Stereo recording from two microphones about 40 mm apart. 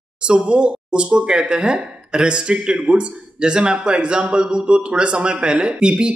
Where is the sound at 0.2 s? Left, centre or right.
Right.